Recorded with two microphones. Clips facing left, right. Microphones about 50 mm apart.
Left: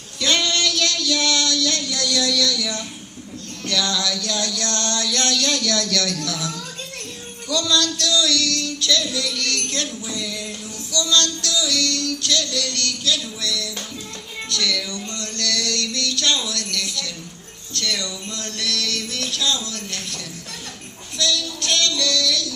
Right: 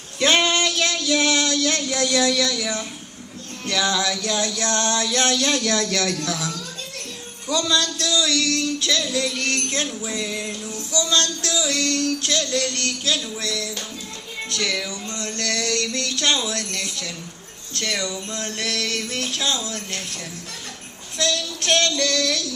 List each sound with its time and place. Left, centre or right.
0.2 s female singing: right
3.7 s music: right
7.5 s music: right
14.8 s music: centre
15.4 s music: right
21.2 s a sound: right